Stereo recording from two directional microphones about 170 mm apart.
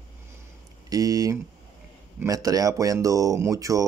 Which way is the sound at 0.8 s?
20° right (ahead or behind).